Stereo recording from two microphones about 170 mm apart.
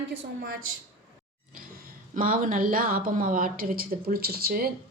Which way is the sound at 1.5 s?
55° right (ahead or behind).